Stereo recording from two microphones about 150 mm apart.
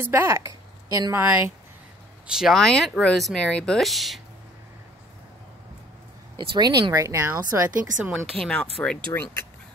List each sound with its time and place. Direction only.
0.0 s speech: 15° right (ahead or behind)
2.2 s speech: 5° right (ahead or behind)
6.3 s speech: 30° right (ahead or behind)
7.8 s speech: 10° right (ahead or behind)
8.4 s speech: 5° left (ahead or behind)